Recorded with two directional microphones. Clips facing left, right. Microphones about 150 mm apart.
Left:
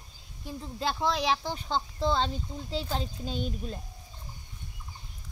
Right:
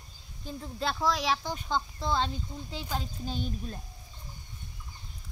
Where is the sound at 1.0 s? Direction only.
30° left (ahead or behind).